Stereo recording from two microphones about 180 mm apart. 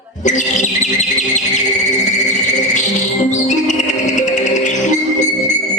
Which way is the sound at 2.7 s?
40° left (ahead or behind).